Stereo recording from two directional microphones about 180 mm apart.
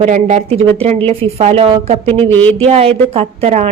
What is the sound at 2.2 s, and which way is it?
Speech, 10° left (ahead or behind).